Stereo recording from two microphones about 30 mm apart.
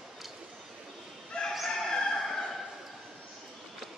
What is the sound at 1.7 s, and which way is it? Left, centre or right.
Fowl, centre.